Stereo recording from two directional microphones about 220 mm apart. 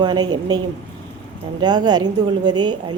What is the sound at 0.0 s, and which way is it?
Speech, 20° right (ahead or behind).